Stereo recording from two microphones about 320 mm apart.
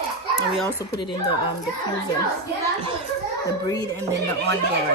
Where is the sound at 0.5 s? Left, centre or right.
Centre.